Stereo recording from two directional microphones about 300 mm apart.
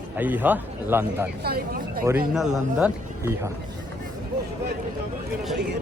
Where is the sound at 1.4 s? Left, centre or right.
Right.